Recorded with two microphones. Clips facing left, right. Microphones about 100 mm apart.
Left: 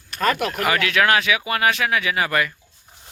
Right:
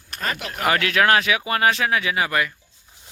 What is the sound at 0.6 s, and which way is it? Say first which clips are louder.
Speech: right 1 dB; 35° right (ahead or behind).